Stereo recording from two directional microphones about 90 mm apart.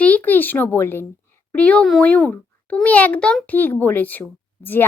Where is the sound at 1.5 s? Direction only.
15° left (ahead or behind).